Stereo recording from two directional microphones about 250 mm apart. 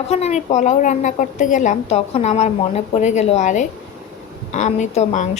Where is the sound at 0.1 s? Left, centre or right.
Left.